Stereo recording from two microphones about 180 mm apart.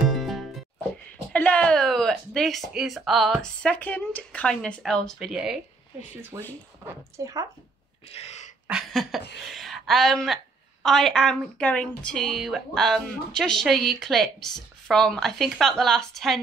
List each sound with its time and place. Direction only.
0.1 s music: centre (ahead or behind)
1.3 s speech: 5° left (ahead or behind)
6.3 s a woman's voice: 15° right (ahead or behind)
8.1 s speech: 35° left (ahead or behind)
8.6 s a sound: 5° right (ahead or behind)
9.5 s a woman's voice: centre (ahead or behind)